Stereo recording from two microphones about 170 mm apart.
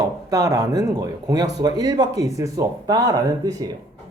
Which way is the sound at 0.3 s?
20° right (ahead or behind).